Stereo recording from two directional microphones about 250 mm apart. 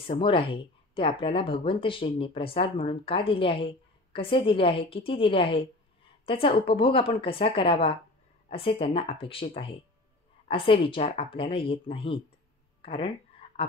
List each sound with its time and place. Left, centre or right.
0.0 s a woman's voice: centre